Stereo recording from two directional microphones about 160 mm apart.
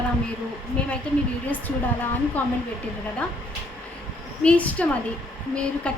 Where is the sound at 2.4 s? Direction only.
10° left (ahead or behind).